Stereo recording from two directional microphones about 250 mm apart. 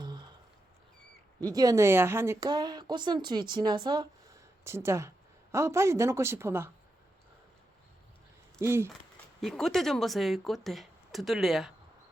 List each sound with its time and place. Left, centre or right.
0.0 s a sound: centre
1.5 s speech: centre
8.6 s speech: centre
9.4 s speech: centre